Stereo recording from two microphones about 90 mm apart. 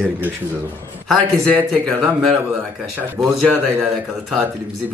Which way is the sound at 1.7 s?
5° left (ahead or behind).